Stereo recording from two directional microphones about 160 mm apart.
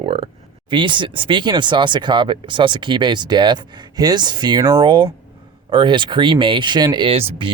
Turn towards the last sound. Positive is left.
turn(degrees=-35)  # may be behind; listen again after turning